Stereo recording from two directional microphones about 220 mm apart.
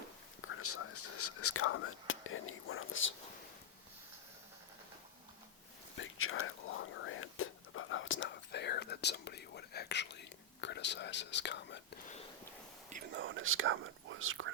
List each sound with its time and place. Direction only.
0.4 s whispering: 75° left (ahead or behind)
6.0 s whispering: 70° left (ahead or behind); by 11.8 s 50° left (ahead or behind)
13.1 s whispering: 60° right (ahead or behind)